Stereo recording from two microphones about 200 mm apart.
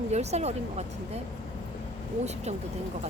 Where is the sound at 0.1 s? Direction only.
35° right (ahead or behind).